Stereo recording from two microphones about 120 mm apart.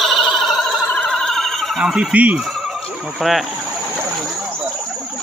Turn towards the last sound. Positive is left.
turn(degrees=0)  # may be behind; listen again after turning